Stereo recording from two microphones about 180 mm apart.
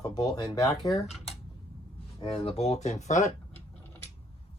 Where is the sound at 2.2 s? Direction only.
30° left (ahead or behind).